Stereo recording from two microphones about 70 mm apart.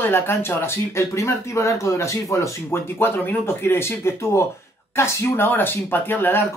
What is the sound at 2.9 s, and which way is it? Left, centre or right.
Speech, left.